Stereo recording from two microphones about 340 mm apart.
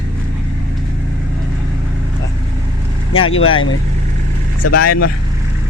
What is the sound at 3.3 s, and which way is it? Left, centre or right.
Speech, left.